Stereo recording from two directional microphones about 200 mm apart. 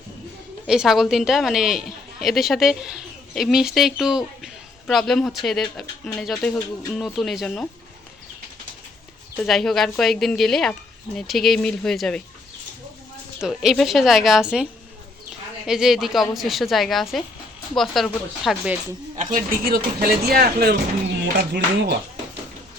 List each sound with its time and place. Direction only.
0.7 s a woman's voice: centre (ahead or behind)
9.4 s a woman's voice: centre (ahead or behind)
13.4 s a woman's voice: centre (ahead or behind)
19.1 s speech: 40° right (ahead or behind); by 21.9 s 55° right (ahead or behind)